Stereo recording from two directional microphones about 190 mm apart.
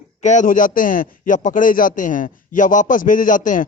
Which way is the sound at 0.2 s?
40° left (ahead or behind).